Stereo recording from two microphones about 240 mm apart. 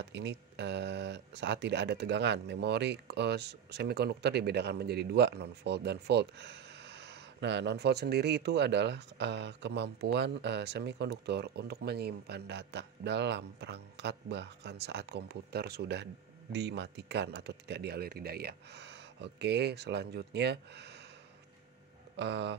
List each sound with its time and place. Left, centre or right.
0.0 s speech: right
22.1 s speech: right